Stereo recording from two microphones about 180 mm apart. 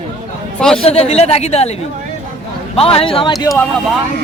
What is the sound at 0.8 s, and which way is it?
Speech, 35° left (ahead or behind).